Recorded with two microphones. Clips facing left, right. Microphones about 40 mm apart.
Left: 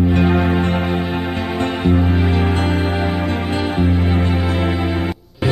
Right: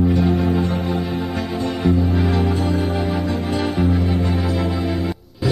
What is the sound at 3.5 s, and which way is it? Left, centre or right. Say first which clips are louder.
Music: left 1 dB; left.